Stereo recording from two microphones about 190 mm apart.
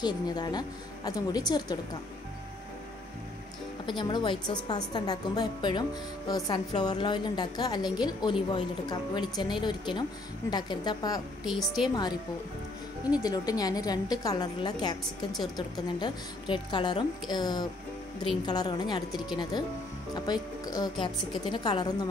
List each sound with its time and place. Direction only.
0.0 s a woman's voice: 20° left (ahead or behind)
3.8 s a woman's voice: 25° left (ahead or behind)
11.4 s a woman's voice: centre (ahead or behind)
11.9 s a woman's voice: 20° left (ahead or behind)
13.2 s a woman's voice: 20° left (ahead or behind)
16.0 s a woman's voice: 25° left (ahead or behind)